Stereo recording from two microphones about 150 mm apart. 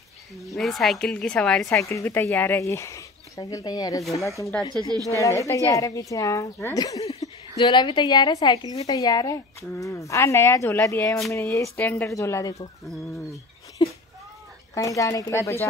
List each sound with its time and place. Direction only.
0.6 s a woman's voice: centre (ahead or behind)
1.7 s speech: 20° left (ahead or behind)
4.9 s a woman's voice: 25° right (ahead or behind)
5.2 s speech: 20° left (ahead or behind)
7.0 s a sound: 40° left (ahead or behind)
7.6 s speech: 30° left (ahead or behind)
13.8 s a sound: 25° left (ahead or behind)
14.7 s speech: 20° left (ahead or behind)